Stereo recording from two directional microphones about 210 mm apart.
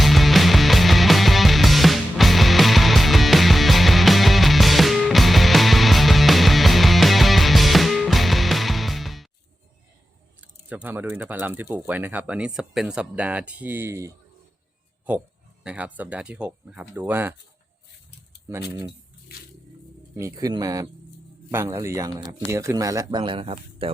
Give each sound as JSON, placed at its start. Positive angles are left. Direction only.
{"t": 0.0, "sound": "music", "side_deg": 0}
{"t": 10.7, "sound": "speech", "side_deg": -10}
{"t": 15.6, "sound": "speech", "side_deg": -5}
{"t": 18.5, "sound": "speech", "side_deg": -15}
{"t": 20.1, "sound": "speech", "side_deg": -15}